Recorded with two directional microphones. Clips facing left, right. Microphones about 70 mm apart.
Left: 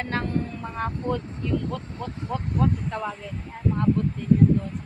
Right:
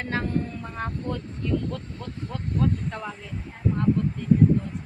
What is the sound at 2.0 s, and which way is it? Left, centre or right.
Speech, centre.